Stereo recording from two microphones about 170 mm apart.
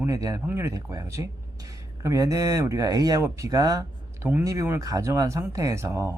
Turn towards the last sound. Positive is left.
turn(degrees=-15)  # may be behind; listen again after turning